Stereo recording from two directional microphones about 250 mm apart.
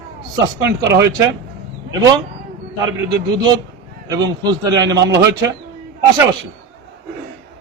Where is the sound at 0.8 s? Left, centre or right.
Centre.